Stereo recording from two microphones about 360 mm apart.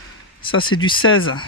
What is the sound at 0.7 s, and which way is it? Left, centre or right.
Speech, left.